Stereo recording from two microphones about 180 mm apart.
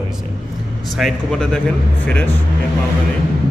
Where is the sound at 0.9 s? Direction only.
Centre (ahead or behind).